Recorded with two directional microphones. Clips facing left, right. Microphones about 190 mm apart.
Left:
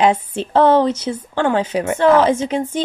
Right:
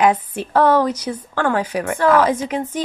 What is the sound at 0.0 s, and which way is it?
A woman's voice, 25° left (ahead or behind).